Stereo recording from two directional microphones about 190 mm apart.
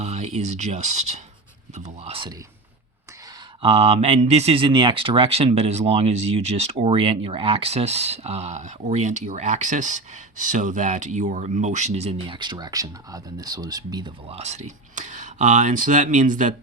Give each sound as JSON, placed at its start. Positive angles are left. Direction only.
{"t": 0.0, "sound": "speech", "side_deg": -35}
{"t": 3.6, "sound": "speech", "side_deg": -30}